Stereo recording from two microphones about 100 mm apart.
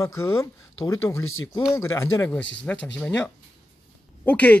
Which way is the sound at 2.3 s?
15° left (ahead or behind).